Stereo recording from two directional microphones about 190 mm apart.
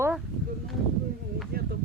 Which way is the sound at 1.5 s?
55° right (ahead or behind).